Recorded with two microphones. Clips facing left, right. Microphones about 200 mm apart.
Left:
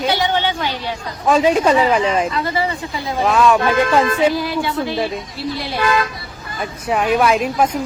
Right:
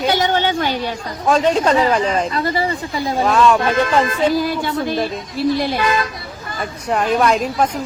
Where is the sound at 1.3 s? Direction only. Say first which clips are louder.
Left 1 dB; 5° left (ahead or behind).